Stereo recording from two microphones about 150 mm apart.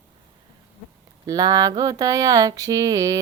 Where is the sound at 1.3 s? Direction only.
25° right (ahead or behind).